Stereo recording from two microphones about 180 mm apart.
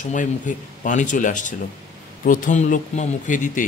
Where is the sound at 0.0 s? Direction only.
45° left (ahead or behind).